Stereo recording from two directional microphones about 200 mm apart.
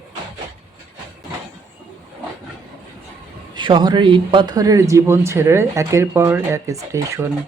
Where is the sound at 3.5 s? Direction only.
25° right (ahead or behind).